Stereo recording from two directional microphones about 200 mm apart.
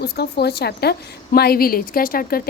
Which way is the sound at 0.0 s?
55° left (ahead or behind).